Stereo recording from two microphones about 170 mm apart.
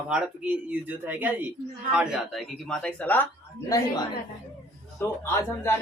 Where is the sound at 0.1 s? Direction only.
10° right (ahead or behind); by 3.2 s 10° left (ahead or behind).